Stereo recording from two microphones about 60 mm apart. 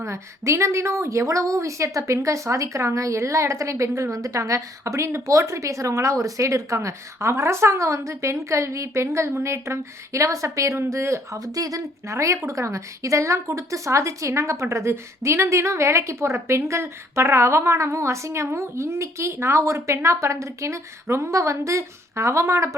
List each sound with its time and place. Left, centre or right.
0.0 s a woman's voice: right
11.3 s speech: right
12.0 s speech: right